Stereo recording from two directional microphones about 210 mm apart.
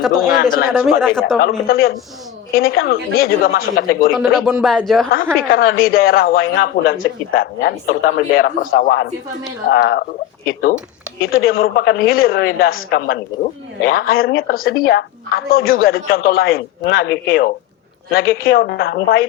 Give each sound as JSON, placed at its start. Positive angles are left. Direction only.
{"t": 0.0, "sound": "speech", "side_deg": 0}
{"t": 1.4, "sound": "speech", "side_deg": 45}
{"t": 4.4, "sound": "speech", "side_deg": 0}
{"t": 5.1, "sound": "speech", "side_deg": 45}
{"t": 11.2, "sound": "speech", "side_deg": 45}